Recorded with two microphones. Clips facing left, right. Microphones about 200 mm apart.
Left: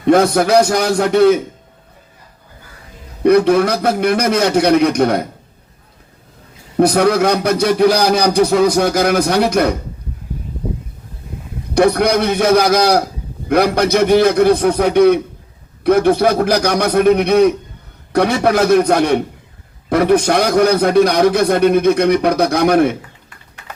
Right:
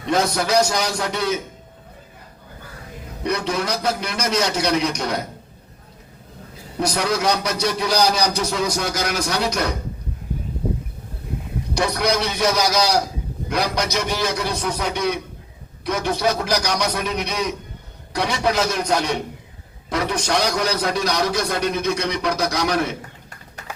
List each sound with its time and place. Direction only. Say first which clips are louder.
0.0 s a man's voice: left 9 dB; 55° left (ahead or behind)
3.2 s a man's voice: left 12 dB; 55° left (ahead or behind)
6.7 s a man's voice: left 10 dB; 55° left (ahead or behind)
11.7 s a man's voice: left 9 dB; 55° left (ahead or behind)